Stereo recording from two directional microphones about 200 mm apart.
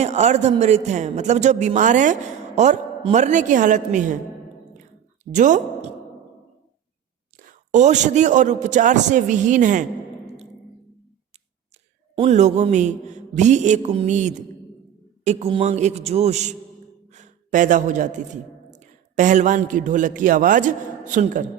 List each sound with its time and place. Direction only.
0.0 s a man's voice: 35° right (ahead or behind)
5.2 s a woman's voice: 40° right (ahead or behind)
7.3 s a man's voice: 40° right (ahead or behind)
12.1 s a man's voice: 30° right (ahead or behind)